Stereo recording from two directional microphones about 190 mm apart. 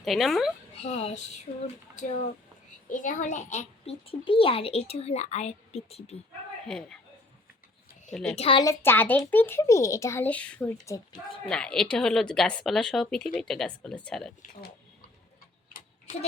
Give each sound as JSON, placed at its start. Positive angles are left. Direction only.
{"t": 0.0, "sound": "a woman's voice", "side_deg": 0}
{"t": 0.8, "sound": "speech", "side_deg": 35}
{"t": 6.7, "sound": "a woman's voice", "side_deg": 5}
{"t": 8.1, "sound": "a woman's voice", "side_deg": 5}
{"t": 8.4, "sound": "a woman's voice", "side_deg": 25}
{"t": 8.8, "sound": "a child's voice", "side_deg": 10}
{"t": 11.4, "sound": "a woman's voice", "side_deg": 5}